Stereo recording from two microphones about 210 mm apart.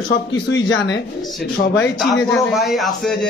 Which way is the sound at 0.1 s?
60° left (ahead or behind).